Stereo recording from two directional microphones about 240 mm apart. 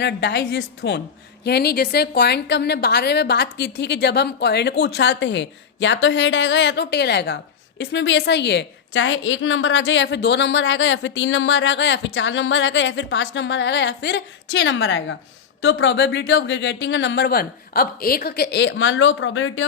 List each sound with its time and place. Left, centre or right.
0.0 s a woman's voice: left